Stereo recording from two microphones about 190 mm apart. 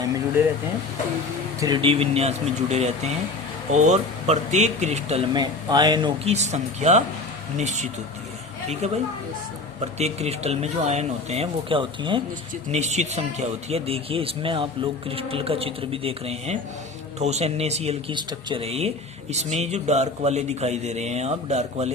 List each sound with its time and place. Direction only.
1.5 s a man's voice: 20° right (ahead or behind)
5.3 s speech: 20° right (ahead or behind)
6.2 s a man's voice: 35° right (ahead or behind)
10.0 s a man's voice: 35° right (ahead or behind)
12.7 s a man's voice: 35° right (ahead or behind)